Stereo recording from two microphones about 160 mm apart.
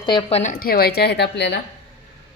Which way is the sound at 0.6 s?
75° left (ahead or behind).